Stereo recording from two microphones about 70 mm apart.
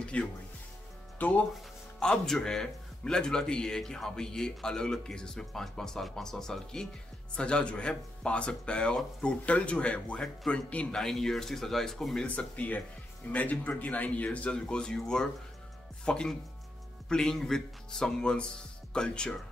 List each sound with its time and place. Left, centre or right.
0.0 s speech: centre
1.1 s music: left
2.0 s speech: centre
11.0 s a man's voice: centre
12.3 s speech: left